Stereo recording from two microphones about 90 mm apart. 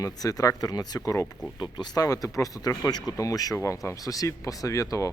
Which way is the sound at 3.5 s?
30° left (ahead or behind).